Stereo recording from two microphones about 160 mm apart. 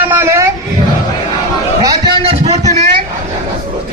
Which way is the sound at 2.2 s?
40° right (ahead or behind).